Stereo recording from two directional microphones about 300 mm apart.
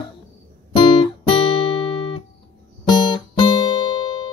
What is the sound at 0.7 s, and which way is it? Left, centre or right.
Guitar, centre.